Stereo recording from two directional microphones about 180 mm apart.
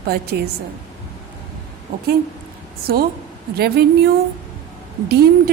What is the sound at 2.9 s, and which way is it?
Speech, 60° right (ahead or behind).